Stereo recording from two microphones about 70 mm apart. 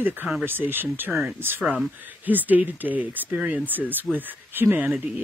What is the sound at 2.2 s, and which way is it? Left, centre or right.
Speech, right.